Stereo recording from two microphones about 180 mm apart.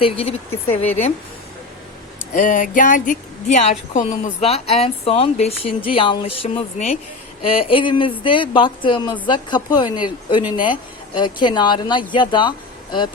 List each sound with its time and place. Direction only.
0.0 s a woman's voice: 30° left (ahead or behind)
0.5 s speech: 10° left (ahead or behind)
2.3 s a woman's voice: 45° left (ahead or behind); by 13.1 s 25° left (ahead or behind)